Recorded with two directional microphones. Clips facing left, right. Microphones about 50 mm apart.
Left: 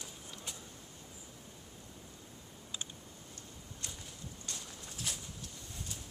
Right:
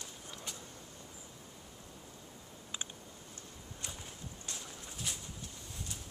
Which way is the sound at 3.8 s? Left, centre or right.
Centre.